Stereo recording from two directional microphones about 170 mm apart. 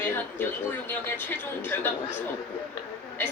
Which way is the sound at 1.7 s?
15° left (ahead or behind).